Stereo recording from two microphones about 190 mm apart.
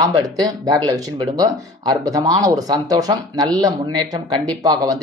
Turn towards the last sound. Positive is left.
turn(degrees=-20)  # may be behind; listen again after turning